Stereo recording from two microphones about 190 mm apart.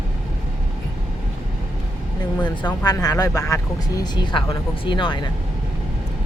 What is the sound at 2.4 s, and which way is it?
Speech, 20° left (ahead or behind).